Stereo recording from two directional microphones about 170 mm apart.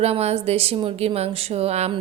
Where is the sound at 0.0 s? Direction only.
40° right (ahead or behind).